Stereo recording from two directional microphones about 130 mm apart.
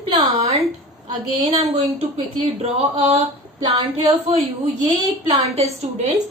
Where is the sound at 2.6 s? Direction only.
45° right (ahead or behind).